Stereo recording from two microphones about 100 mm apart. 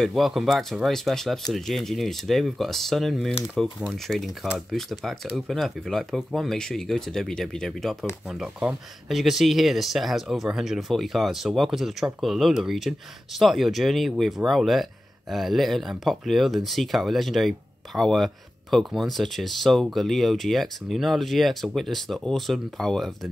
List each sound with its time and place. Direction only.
0.0 s speech: centre (ahead or behind)
8.3 s speech: 10° right (ahead or behind)